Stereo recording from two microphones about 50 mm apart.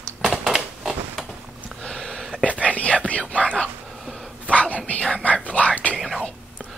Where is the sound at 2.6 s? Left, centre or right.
Left.